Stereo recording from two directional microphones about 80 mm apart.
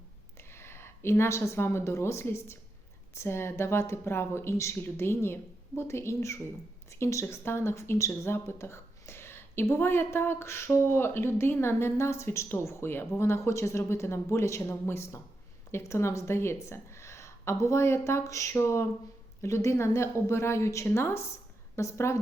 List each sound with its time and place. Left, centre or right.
0.3 s a woman's voice: left